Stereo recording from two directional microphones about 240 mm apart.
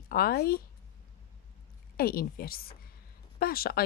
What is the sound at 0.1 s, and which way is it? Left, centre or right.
Speech, left.